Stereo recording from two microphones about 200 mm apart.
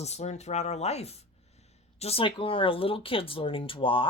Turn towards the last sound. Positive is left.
turn(degrees=25)  # may be behind; listen again after turning